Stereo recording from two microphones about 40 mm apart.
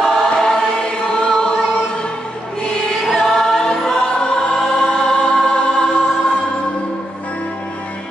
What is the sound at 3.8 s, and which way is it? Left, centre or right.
Choir, centre.